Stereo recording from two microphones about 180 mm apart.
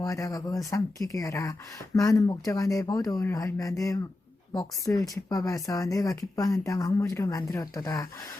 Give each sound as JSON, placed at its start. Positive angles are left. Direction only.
{"t": 0.0, "sound": "speech", "side_deg": 20}